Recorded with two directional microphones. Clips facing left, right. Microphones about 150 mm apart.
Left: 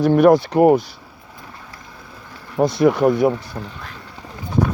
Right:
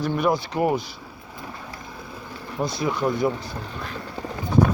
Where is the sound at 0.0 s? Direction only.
75° left (ahead or behind); by 0.8 s 60° left (ahead or behind).